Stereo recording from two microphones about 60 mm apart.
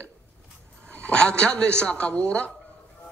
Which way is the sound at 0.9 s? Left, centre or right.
Centre.